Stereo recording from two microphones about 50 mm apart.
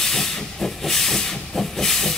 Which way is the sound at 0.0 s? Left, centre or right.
Centre.